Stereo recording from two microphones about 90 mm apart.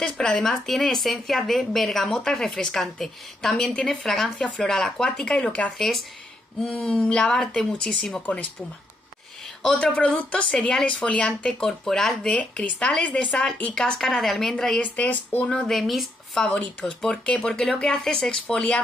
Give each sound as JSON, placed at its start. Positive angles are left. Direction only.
{"t": 0.0, "sound": "speech", "side_deg": 5}
{"t": 9.6, "sound": "speech", "side_deg": 5}
{"t": 14.8, "sound": "speech", "side_deg": 20}
{"t": 15.4, "sound": "speech", "side_deg": 5}